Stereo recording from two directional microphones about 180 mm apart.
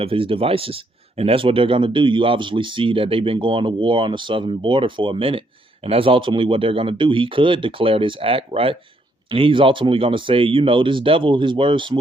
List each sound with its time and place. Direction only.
0.0 s speech: 30° right (ahead or behind)